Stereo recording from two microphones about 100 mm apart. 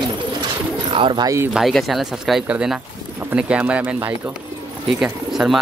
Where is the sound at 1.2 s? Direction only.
30° right (ahead or behind).